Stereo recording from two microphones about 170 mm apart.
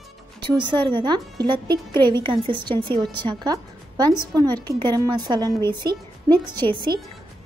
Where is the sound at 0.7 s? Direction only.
30° right (ahead or behind).